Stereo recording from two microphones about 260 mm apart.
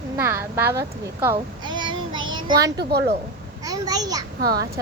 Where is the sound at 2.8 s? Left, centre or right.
Right.